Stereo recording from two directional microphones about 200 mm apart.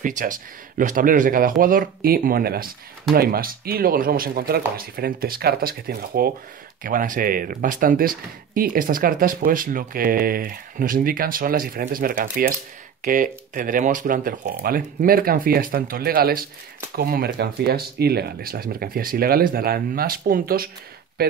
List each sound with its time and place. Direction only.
0.0 s speech: 40° right (ahead or behind)